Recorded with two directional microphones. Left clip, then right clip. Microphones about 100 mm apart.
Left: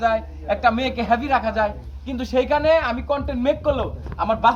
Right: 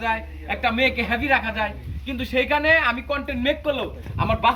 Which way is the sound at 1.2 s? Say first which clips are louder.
Left 1 dB; 35° left (ahead or behind).